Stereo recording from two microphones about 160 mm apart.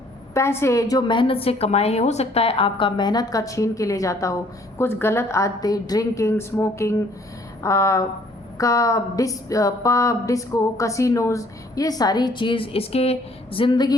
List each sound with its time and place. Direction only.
0.3 s a woman's voice: 15° left (ahead or behind)